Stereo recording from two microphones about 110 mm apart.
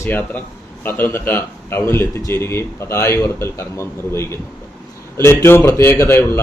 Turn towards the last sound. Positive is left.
turn(degrees=25)  # may be behind; listen again after turning